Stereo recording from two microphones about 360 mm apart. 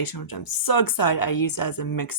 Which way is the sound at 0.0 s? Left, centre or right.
Left.